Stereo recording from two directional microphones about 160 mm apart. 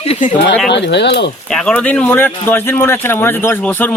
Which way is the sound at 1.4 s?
5° left (ahead or behind).